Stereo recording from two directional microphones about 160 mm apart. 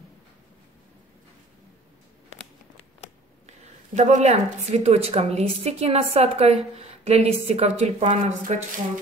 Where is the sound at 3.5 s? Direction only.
45° right (ahead or behind).